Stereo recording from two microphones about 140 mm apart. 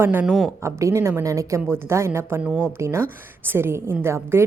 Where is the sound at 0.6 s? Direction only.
20° right (ahead or behind).